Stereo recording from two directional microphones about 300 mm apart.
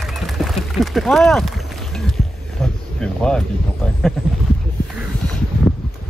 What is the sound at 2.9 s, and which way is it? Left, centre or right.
Speech, centre.